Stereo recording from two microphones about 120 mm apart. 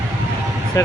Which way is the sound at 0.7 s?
30° left (ahead or behind).